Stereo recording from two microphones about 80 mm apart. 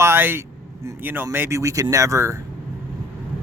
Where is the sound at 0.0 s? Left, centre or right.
Right.